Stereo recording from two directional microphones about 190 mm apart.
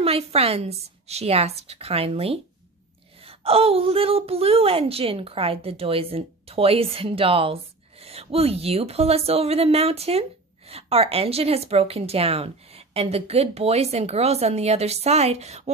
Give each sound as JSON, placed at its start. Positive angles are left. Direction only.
{"t": 0.0, "sound": "a woman's voice", "side_deg": -30}